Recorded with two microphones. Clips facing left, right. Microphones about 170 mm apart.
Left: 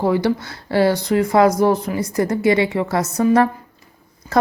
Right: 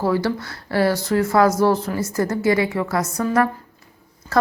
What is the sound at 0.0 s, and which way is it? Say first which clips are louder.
A woman's voice: left 3 dB; 20° left (ahead or behind).